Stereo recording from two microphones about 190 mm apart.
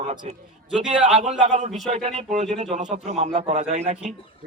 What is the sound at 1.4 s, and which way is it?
A man's voice, 40° right (ahead or behind).